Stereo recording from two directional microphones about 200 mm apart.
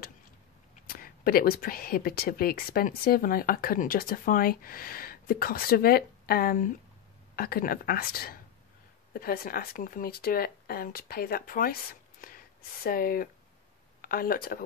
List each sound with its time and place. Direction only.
0.8 s speech: 45° left (ahead or behind)